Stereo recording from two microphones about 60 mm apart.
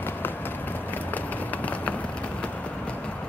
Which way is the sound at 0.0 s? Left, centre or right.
Left.